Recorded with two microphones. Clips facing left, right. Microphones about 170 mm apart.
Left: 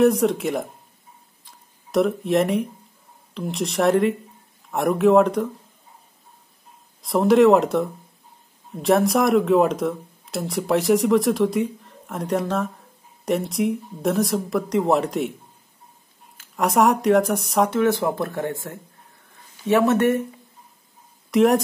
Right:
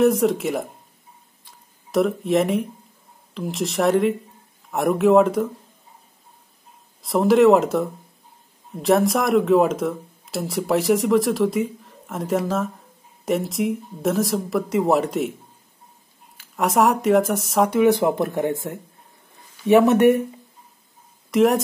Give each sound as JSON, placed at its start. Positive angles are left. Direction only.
{"t": 0.0, "sound": "speech", "side_deg": 0}
{"t": 1.4, "sound": "tick-tock", "side_deg": 0}
{"t": 3.3, "sound": "speech", "side_deg": 0}
{"t": 7.0, "sound": "speech", "side_deg": 0}
{"t": 16.3, "sound": "speech", "side_deg": 0}
{"t": 17.6, "sound": "speech", "side_deg": -15}
{"t": 21.3, "sound": "speech", "side_deg": 0}